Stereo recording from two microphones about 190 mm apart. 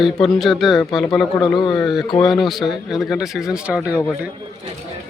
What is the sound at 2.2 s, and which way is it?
Speech, centre (ahead or behind).